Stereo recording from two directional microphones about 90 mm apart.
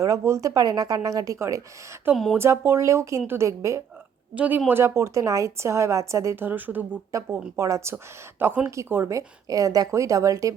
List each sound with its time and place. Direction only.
0.0 s speech: 35° right (ahead or behind)
2.1 s speech: 20° right (ahead or behind)
4.4 s speech: 20° right (ahead or behind)
4.7 s speech: 30° right (ahead or behind)
7.1 s speech: 35° right (ahead or behind)